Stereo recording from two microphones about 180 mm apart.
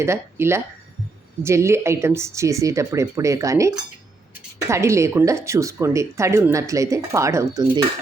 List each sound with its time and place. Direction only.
0.0 s speech: 15° right (ahead or behind)